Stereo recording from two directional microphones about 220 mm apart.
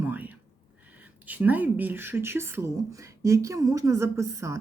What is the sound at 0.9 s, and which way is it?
A woman's voice, 5° right (ahead or behind).